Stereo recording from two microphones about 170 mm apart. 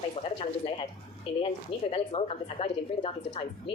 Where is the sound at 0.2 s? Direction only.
30° left (ahead or behind).